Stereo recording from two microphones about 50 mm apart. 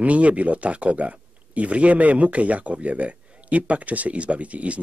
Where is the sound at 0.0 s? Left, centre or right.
Right.